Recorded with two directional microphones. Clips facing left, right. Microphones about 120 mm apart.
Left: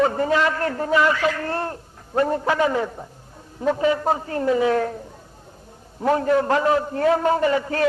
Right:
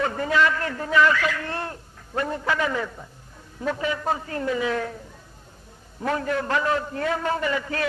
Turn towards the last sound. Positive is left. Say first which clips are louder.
# left 6 dB
turn(degrees=35)  # may be behind; listen again after turning